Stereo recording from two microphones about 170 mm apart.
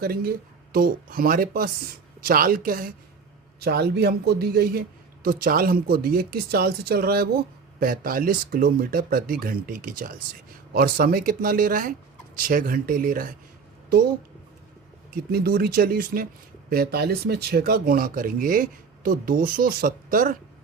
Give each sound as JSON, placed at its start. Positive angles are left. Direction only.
{"t": 0.0, "sound": "speech", "side_deg": -65}
{"t": 3.6, "sound": "speech", "side_deg": -70}
{"t": 15.1, "sound": "speech", "side_deg": -60}